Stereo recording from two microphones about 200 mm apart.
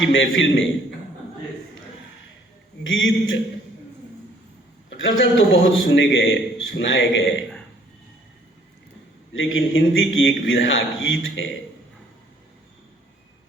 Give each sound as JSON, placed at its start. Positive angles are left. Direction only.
{"t": 0.0, "sound": "a man's voice", "side_deg": 70}
{"t": 2.8, "sound": "a man's voice", "side_deg": 70}
{"t": 4.9, "sound": "a man's voice", "side_deg": 70}
{"t": 9.3, "sound": "a man's voice", "side_deg": 70}